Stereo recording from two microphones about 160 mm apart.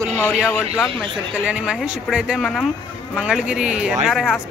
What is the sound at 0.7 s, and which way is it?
Speech, centre (ahead or behind).